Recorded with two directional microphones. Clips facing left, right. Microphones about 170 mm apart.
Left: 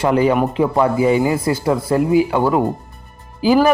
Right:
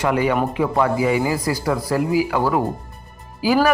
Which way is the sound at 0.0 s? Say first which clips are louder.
Left 4 dB; 30° left (ahead or behind).